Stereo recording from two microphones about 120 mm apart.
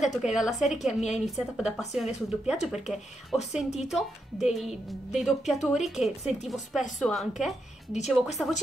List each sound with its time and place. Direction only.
0.0 s a woman's voice: 5° right (ahead or behind)
7.9 s speech: 70° left (ahead or behind)